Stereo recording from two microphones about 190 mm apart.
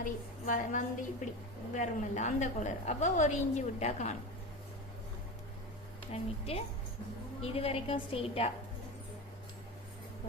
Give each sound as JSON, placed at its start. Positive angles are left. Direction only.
{"t": 0.0, "sound": "a woman's voice", "side_deg": 45}
{"t": 6.1, "sound": "a woman's voice", "side_deg": 30}